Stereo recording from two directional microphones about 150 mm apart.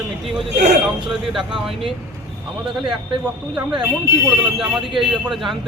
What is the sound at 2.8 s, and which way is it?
Speech, 5° right (ahead or behind).